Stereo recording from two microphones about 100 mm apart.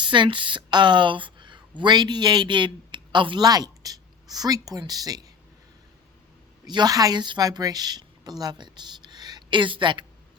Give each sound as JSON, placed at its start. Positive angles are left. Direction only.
{"t": 0.0, "sound": "speech", "side_deg": -50}
{"t": 6.7, "sound": "a woman's voice", "side_deg": -45}